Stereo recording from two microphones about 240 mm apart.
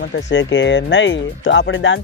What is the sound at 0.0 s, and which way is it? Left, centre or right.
Speech, left.